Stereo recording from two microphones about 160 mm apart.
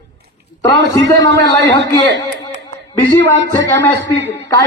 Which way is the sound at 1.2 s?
90° right.